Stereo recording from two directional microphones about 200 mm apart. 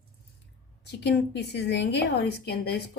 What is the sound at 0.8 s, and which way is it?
A woman's voice, 60° left (ahead or behind).